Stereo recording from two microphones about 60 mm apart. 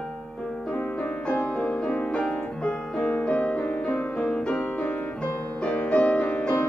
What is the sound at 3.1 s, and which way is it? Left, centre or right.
Music, left.